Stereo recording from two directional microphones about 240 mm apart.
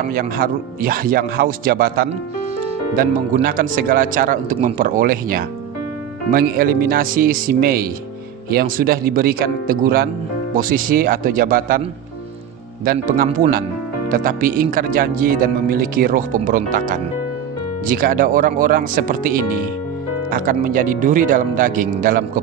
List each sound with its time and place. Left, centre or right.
0.1 s speech: right
12.8 s speech: right